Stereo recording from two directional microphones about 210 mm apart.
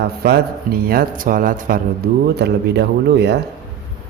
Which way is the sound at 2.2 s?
50° right (ahead or behind).